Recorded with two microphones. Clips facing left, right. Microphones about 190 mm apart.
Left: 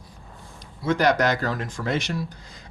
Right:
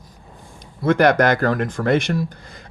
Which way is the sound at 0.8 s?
55° right (ahead or behind).